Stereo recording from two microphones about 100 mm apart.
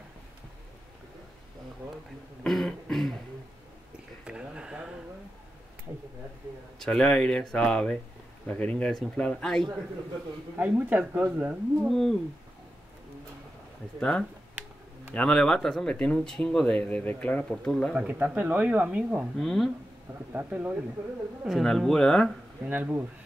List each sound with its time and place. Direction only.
2.4 s throat clearing: 5° left (ahead or behind)
4.3 s a sound: 10° right (ahead or behind)
6.8 s speech: 5° left (ahead or behind)
10.6 s speech: 15° right (ahead or behind)
11.9 s speech: centre (ahead or behind)
13.9 s speech: 10° left (ahead or behind)
17.9 s speech: 15° right (ahead or behind)
19.4 s speech: centre (ahead or behind)
20.3 s speech: 15° right (ahead or behind)
21.5 s speech: centre (ahead or behind)
22.7 s speech: 15° right (ahead or behind)